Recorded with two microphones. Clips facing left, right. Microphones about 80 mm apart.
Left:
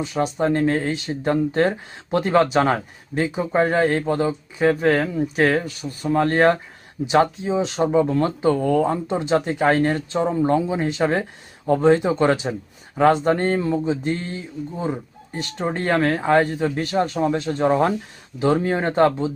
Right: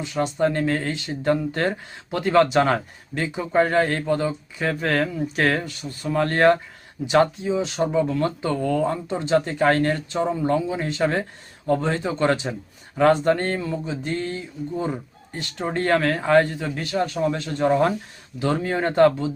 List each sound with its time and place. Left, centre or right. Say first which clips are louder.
0.1 s speech: even; centre
2.0 s speech: left 3 dB; left
2.3 s speech: right 1 dB; centre
6.1 s speech: left 1 dB; left
7.4 s speech: left 2 dB; left
9.5 s speech: left 1 dB; centre
10.9 s speech: left 2 dB; centre
12.3 s speech: left 2 dB; centre
13.0 s speech: left 1 dB; centre
14.8 s speech: left 1 dB; centre
15.3 s speech: left 2 dB; left
17.6 s speech: even; centre